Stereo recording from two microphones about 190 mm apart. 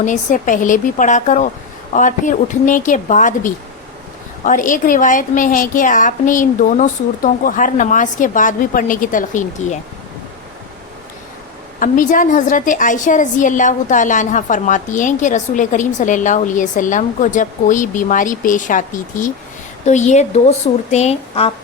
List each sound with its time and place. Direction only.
0.0 s a woman's voice: 40° left (ahead or behind)
11.8 s a woman's voice: 45° left (ahead or behind)